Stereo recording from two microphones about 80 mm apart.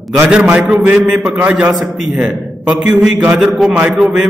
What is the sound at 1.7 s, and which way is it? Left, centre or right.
A man's voice, centre.